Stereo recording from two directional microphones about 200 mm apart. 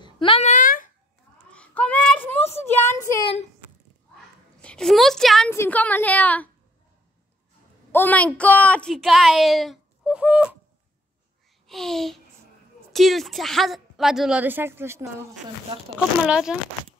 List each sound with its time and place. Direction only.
0.0 s a sound: 25° left (ahead or behind); by 0.9 s 40° left (ahead or behind)
1.5 s child singing: 5° left (ahead or behind)
4.6 s a woman's voice: 5° left (ahead or behind)
7.9 s a woman's voice: 10° left (ahead or behind)
11.6 s a child's voice: centre (ahead or behind)
16.3 s a woman's voice: 5° right (ahead or behind)